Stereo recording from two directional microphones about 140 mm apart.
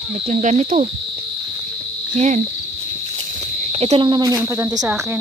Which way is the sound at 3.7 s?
45° right (ahead or behind).